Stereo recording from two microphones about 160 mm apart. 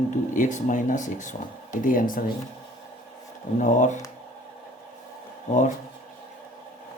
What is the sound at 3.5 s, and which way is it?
Speech, 50° left (ahead or behind).